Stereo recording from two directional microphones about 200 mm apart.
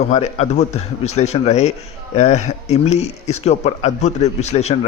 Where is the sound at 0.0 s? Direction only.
35° left (ahead or behind).